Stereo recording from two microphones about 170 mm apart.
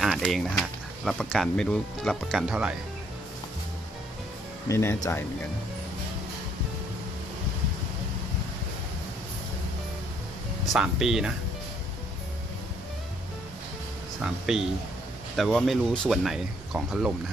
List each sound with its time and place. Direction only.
0.0 s speech: centre (ahead or behind)
4.6 s speech: 15° left (ahead or behind)
10.7 s speech: 5° right (ahead or behind)
14.2 s speech: 5° right (ahead or behind)